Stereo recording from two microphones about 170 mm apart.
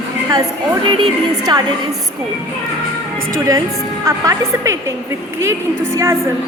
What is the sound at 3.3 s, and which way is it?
A woman's voice, 20° right (ahead or behind).